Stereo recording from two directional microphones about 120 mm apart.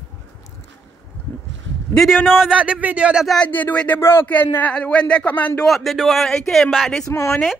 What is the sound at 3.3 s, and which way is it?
Speech, 15° left (ahead or behind).